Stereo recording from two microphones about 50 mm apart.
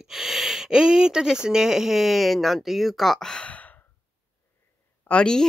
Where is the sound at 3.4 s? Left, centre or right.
Left.